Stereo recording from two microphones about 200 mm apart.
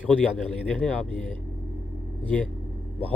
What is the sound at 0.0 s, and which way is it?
A man's voice, 5° left (ahead or behind).